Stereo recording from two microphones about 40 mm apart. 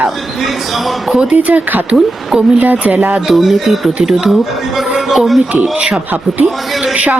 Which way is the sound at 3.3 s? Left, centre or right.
Centre.